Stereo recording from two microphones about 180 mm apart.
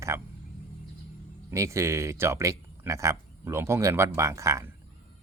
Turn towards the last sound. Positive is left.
turn(degrees=-15)  # may be behind; listen again after turning